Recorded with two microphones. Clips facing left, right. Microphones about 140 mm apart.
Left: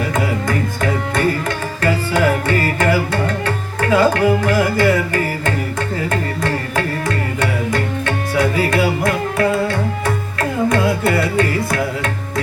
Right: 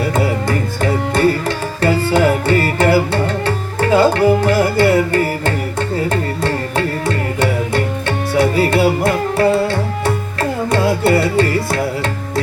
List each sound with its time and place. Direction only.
0.4 s music: 30° right (ahead or behind)